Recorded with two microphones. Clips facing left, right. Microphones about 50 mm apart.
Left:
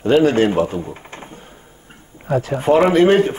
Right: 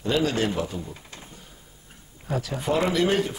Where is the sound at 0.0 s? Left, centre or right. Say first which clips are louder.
Left 10 dB; left.